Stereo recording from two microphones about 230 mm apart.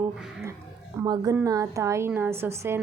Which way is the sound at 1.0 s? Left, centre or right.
Centre.